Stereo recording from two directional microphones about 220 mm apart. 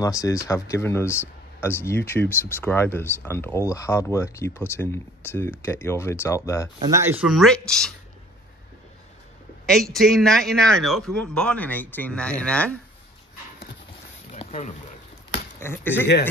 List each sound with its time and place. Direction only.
0.0 s speech: 15° left (ahead or behind)
6.8 s speech: 15° right (ahead or behind)
7.2 s a man's voice: centre (ahead or behind)
9.7 s a man's voice: centre (ahead or behind)
14.3 s a sound: 30° left (ahead or behind)
15.6 s speech: 10° left (ahead or behind)